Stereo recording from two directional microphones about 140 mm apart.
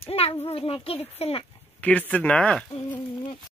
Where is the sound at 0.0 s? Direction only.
45° left (ahead or behind).